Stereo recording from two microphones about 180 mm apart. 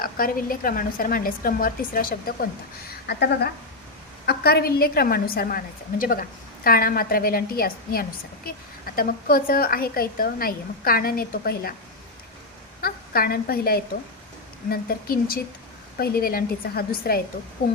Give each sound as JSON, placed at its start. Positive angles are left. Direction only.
{"t": 0.0, "sound": "a woman's voice", "side_deg": 50}
{"t": 3.1, "sound": "a woman's voice", "side_deg": 65}
{"t": 12.8, "sound": "a woman's voice", "side_deg": 55}